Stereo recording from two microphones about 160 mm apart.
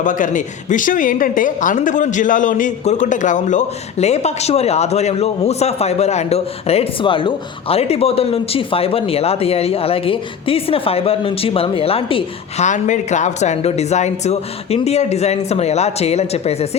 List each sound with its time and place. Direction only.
0.0 s a woman's voice: 55° left (ahead or behind); by 12.6 s 35° left (ahead or behind)
12.6 s a woman's voice: 50° left (ahead or behind)